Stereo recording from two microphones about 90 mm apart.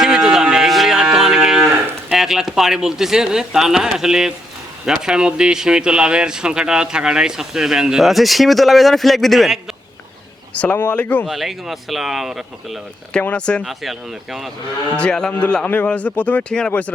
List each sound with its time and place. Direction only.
0.0 s a sound: 5° right (ahead or behind)
2.0 s speech: 5° right (ahead or behind)
10.5 s speech: 15° left (ahead or behind)
11.3 s speech: 5° right (ahead or behind)
13.2 s speech: 10° left (ahead or behind)
13.7 s speech: centre (ahead or behind)
14.9 s speech: 10° left (ahead or behind)